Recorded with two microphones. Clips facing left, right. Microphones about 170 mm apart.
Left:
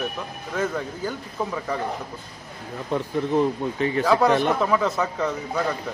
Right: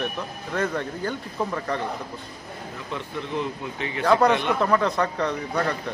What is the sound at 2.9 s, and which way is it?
Speech, 40° left (ahead or behind).